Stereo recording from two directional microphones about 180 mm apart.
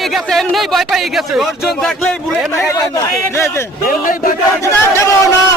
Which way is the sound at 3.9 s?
50° left (ahead or behind).